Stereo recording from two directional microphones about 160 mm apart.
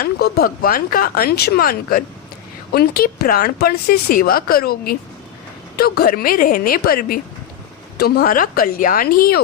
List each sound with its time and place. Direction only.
0.0 s a woman's voice: 75° left (ahead or behind)
7.9 s a woman's voice: 80° left